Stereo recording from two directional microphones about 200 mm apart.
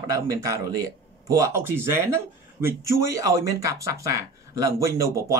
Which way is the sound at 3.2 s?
15° right (ahead or behind).